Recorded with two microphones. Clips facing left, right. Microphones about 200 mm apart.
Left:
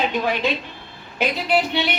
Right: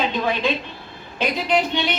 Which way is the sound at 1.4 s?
10° left (ahead or behind).